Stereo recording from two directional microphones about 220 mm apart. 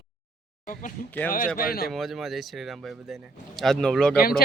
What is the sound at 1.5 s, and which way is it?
Speech, 40° left (ahead or behind).